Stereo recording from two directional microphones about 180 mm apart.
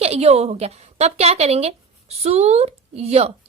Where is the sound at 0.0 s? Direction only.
35° right (ahead or behind).